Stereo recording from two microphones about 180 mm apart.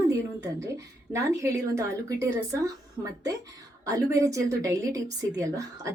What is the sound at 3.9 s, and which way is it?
A woman's voice, 20° right (ahead or behind).